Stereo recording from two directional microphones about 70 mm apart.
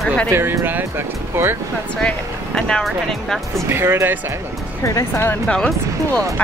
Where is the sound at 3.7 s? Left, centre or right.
Right.